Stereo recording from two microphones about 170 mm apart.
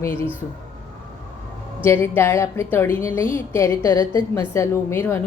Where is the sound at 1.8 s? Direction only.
15° left (ahead or behind).